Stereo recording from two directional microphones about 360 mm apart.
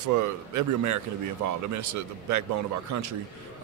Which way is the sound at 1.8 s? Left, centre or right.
Right.